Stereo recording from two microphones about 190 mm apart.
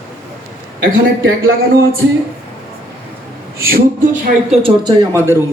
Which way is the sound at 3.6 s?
50° right (ahead or behind).